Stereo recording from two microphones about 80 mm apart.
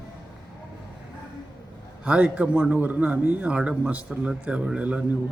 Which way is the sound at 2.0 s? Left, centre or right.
Centre.